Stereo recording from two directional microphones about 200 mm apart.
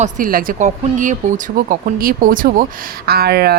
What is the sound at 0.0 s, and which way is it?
Speech, 45° right (ahead or behind).